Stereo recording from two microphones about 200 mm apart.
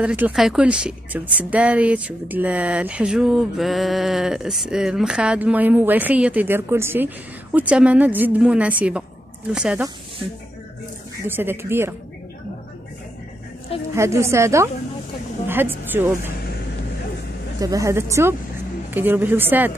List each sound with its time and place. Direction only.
0.0 s a woman's voice: 5° right (ahead or behind)
11.2 s a woman's voice: 10° right (ahead or behind)
13.9 s a woman's voice: 15° right (ahead or behind)
17.6 s a woman's voice: 15° right (ahead or behind)